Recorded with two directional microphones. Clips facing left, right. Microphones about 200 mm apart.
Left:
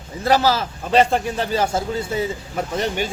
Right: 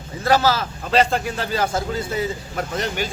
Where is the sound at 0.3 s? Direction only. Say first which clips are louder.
Even; 15° left (ahead or behind).